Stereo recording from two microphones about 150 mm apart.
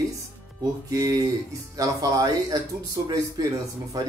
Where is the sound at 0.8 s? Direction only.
25° right (ahead or behind).